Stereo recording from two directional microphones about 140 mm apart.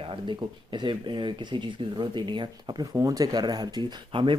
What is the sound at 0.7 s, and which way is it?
Speech, 35° right (ahead or behind).